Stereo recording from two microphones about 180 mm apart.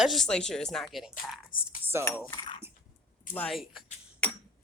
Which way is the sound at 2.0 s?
10° left (ahead or behind).